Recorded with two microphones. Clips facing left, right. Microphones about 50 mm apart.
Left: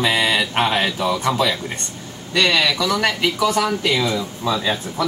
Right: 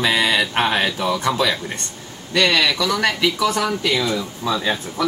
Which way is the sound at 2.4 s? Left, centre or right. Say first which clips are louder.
Even; centre.